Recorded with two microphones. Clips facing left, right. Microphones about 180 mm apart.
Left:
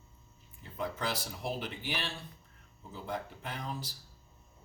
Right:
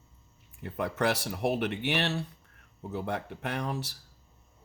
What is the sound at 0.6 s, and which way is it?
Speech, 70° right (ahead or behind).